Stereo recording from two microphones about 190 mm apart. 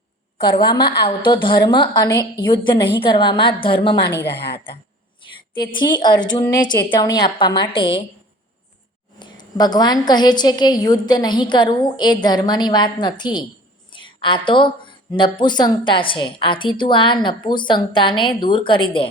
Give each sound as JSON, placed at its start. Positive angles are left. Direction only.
{"t": 0.6, "sound": "a woman's voice", "side_deg": 25}
{"t": 4.3, "sound": "a woman's voice", "side_deg": 60}
{"t": 5.5, "sound": "a woman's voice", "side_deg": 25}
{"t": 9.1, "sound": "a woman's voice", "side_deg": 25}
{"t": 13.9, "sound": "a sound", "side_deg": 25}
{"t": 15.1, "sound": "a woman's voice", "side_deg": 25}